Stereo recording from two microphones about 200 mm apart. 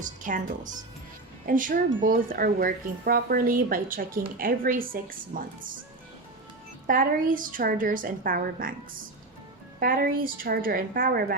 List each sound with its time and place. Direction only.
0.0 s a woman's voice: 40° right (ahead or behind)
6.8 s speech: 45° right (ahead or behind)
9.8 s speech: 45° right (ahead or behind)